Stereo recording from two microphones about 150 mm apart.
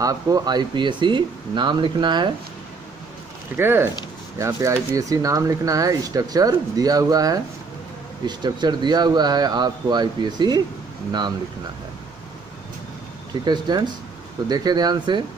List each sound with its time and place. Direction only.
0.0 s speech: 25° right (ahead or behind)
3.5 s speech: 15° right (ahead or behind)
13.5 s speech: 30° right (ahead or behind)